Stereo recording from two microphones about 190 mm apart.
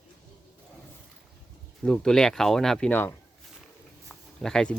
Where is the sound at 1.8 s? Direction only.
5° left (ahead or behind).